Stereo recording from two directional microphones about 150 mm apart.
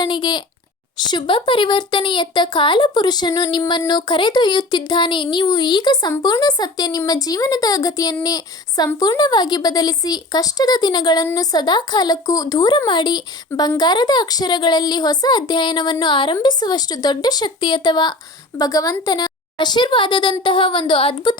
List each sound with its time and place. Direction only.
0.0 s a child's voice: 30° left (ahead or behind)